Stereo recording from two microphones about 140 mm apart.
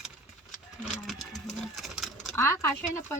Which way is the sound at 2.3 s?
20° left (ahead or behind).